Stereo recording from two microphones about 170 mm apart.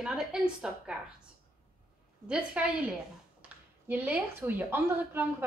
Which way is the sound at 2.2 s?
5° right (ahead or behind).